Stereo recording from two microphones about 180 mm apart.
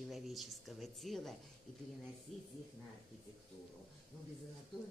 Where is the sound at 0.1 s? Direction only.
Centre (ahead or behind).